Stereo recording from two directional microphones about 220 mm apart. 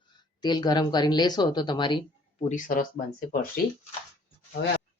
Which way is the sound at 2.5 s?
35° left (ahead or behind).